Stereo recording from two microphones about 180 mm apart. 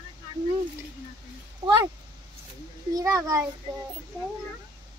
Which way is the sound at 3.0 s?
15° right (ahead or behind).